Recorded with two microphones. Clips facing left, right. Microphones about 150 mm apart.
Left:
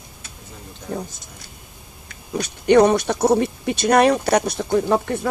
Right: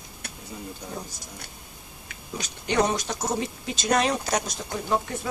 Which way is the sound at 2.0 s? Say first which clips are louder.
Left 9 dB; 60° left (ahead or behind).